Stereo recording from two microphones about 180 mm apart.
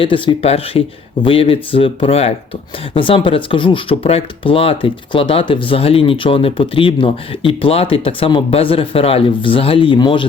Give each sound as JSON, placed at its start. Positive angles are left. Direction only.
{"t": 0.0, "sound": "speech", "side_deg": 30}